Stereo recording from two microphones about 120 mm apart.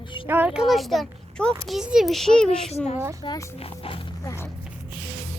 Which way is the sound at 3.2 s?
40° left (ahead or behind).